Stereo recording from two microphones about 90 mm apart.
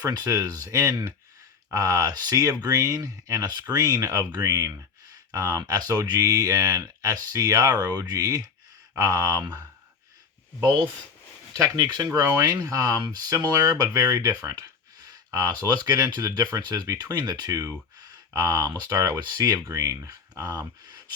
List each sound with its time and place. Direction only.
0.0 s speech: 45° right (ahead or behind)
11.5 s speech: 40° right (ahead or behind)